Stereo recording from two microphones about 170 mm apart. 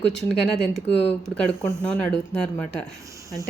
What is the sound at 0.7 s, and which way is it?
Speech, 40° left (ahead or behind).